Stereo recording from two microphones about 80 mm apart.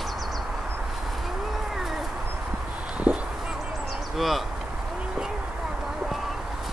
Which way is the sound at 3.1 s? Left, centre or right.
Right.